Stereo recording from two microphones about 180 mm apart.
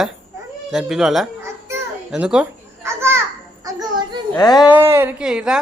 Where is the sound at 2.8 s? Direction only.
15° right (ahead or behind).